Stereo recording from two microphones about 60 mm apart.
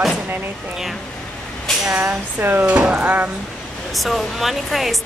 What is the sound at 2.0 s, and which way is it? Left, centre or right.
Speech, right.